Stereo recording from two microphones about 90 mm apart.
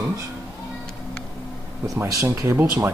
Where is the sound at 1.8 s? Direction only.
40° right (ahead or behind).